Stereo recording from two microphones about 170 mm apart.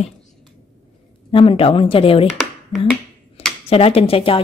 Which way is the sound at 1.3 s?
30° left (ahead or behind).